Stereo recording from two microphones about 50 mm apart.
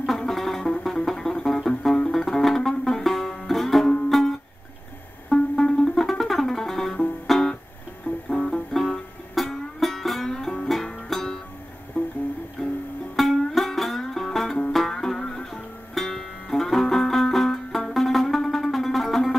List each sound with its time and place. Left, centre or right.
0.0 s music: centre
8.7 s music: centre
11.9 s music: left
12.6 s music: centre